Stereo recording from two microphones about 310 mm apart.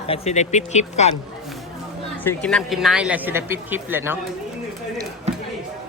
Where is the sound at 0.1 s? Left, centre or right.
Left.